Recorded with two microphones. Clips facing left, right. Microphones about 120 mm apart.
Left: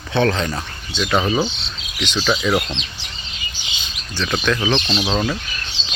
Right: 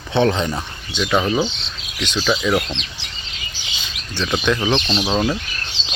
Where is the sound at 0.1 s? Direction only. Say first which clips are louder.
Right 1 dB; 20° right (ahead or behind).